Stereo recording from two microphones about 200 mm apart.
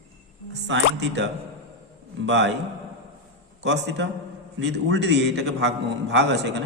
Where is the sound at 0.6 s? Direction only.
60° right (ahead or behind).